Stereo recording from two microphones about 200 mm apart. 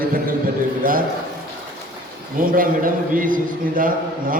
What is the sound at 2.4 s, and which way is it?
A man's voice, 45° right (ahead or behind).